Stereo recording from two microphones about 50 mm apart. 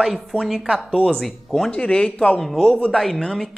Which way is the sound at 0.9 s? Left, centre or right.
Left.